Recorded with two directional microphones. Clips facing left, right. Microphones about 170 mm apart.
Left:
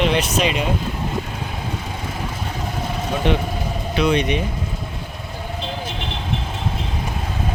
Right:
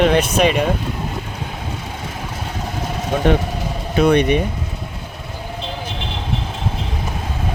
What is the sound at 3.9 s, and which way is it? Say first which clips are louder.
Speech: right 5 dB; 50° right (ahead or behind).